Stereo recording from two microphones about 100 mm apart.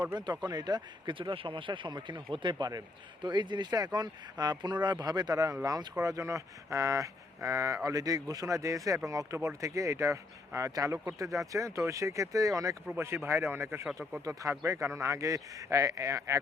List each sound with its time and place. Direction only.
0.0 s a man's voice: 45° right (ahead or behind); by 13.8 s 25° right (ahead or behind)
13.8 s speech: 10° right (ahead or behind)
14.7 s speech: 30° right (ahead or behind)